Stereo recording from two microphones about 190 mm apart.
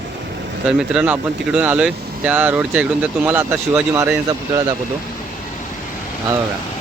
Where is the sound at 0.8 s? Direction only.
5° right (ahead or behind).